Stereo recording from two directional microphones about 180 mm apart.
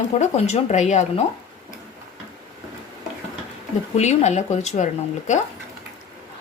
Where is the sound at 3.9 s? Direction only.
40° left (ahead or behind).